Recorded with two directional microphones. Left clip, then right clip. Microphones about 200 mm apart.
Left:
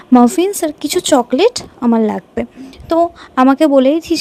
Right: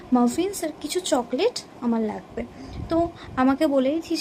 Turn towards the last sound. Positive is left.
turn(degrees=50)  # may be behind; listen again after turning